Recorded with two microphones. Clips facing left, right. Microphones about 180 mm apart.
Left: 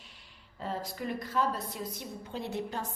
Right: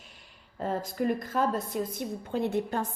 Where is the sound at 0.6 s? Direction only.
50° right (ahead or behind).